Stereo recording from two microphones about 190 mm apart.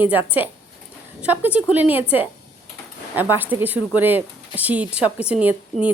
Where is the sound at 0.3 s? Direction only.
10° right (ahead or behind).